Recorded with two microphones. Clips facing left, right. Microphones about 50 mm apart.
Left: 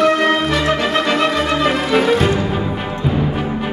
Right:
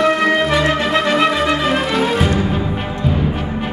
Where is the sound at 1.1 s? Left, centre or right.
Centre.